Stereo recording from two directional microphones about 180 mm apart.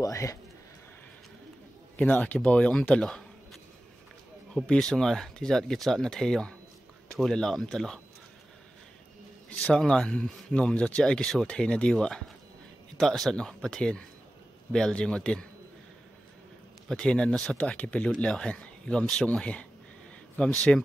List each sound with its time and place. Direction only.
0.0 s a man's voice: 20° left (ahead or behind)
2.0 s speech: 10° left (ahead or behind)
4.6 s speech: centre (ahead or behind)
9.7 s speech: 5° left (ahead or behind)
16.9 s speech: 5° left (ahead or behind)